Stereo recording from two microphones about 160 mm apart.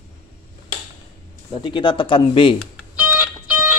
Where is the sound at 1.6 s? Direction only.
30° left (ahead or behind).